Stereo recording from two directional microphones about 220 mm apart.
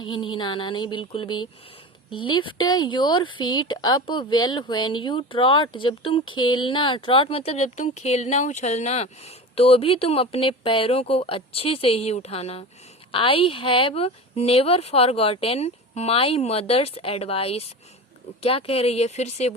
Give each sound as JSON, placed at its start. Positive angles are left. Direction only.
{"t": 0.0, "sound": "speech", "side_deg": 20}